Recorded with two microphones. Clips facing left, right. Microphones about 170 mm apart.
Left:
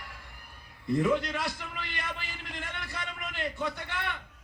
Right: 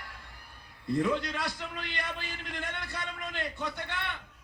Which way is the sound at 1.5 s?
20° right (ahead or behind).